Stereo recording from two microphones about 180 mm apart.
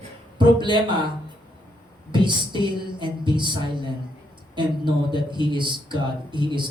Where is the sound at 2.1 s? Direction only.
25° right (ahead or behind).